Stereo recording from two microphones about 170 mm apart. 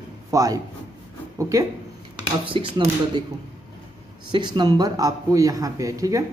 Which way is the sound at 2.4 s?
30° right (ahead or behind).